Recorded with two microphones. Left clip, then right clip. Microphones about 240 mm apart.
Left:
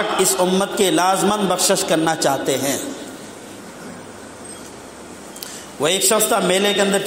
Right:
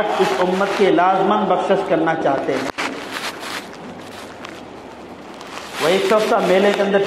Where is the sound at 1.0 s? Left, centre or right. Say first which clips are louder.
Right 2 dB; left.